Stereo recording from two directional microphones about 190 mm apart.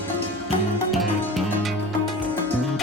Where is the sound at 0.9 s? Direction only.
Centre (ahead or behind).